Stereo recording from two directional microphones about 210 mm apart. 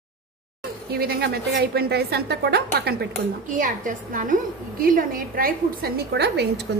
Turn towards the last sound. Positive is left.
turn(degrees=-50)  # may be behind; listen again after turning